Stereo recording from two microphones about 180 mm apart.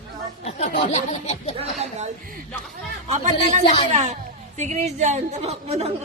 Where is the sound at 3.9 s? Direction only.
40° right (ahead or behind).